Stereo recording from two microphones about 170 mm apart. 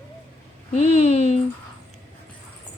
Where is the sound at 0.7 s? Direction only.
40° left (ahead or behind).